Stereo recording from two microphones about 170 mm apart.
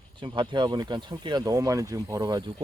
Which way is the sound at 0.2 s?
30° right (ahead or behind).